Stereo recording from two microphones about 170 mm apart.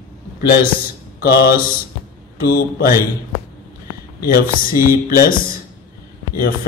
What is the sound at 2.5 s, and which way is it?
Mantra, 60° left (ahead or behind).